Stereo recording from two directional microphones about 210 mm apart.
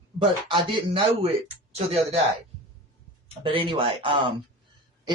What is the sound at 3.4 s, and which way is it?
Speech, 25° right (ahead or behind).